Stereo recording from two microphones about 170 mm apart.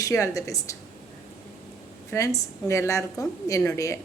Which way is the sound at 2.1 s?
15° left (ahead or behind).